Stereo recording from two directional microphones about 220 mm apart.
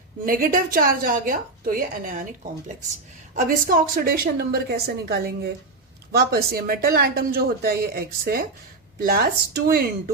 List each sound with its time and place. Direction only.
0.3 s a woman's voice: 40° right (ahead or behind)
3.3 s speech: 40° right (ahead or behind)